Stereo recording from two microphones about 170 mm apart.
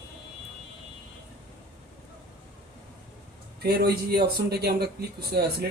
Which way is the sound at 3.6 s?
65° right (ahead or behind).